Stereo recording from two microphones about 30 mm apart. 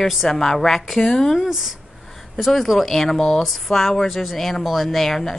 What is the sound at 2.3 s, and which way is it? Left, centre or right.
Speech, centre.